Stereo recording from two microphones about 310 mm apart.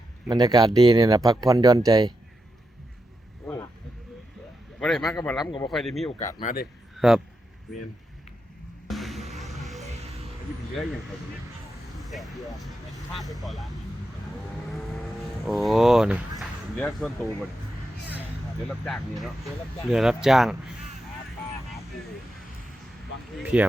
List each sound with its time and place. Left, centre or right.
0.3 s speech: centre
3.4 s vehicle: centre
4.8 s speech: centre
5.7 s speech: centre
6.1 s speech: left
7.0 s speech: centre
8.9 s music: centre
10.0 s music: centre
12.0 s speech: centre
15.4 s speech: centre
18.9 s speech: centre
23.3 s speech: centre